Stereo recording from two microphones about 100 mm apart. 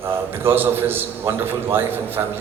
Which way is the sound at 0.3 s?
20° right (ahead or behind).